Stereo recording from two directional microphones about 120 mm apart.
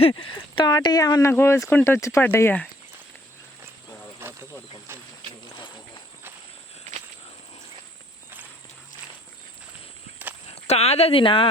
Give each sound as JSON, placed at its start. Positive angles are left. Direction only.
{"t": 0.1, "sound": "speech", "side_deg": 40}
{"t": 1.3, "sound": "speech", "side_deg": 20}
{"t": 4.2, "sound": "snake", "side_deg": -20}
{"t": 4.9, "sound": "a sound", "side_deg": -20}
{"t": 6.9, "sound": "walk", "side_deg": -80}
{"t": 10.5, "sound": "speech", "side_deg": 60}